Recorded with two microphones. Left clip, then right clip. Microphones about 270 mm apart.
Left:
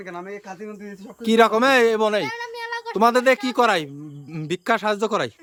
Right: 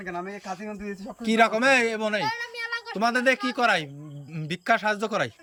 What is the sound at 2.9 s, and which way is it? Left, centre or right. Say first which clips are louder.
Speech: left 6 dB; centre.